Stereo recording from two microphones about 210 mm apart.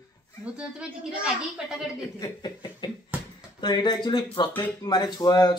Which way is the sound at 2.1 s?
20° left (ahead or behind).